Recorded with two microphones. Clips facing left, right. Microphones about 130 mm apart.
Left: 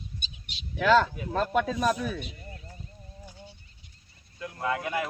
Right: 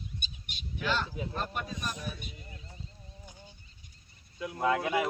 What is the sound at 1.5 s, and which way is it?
Speech, 90° left.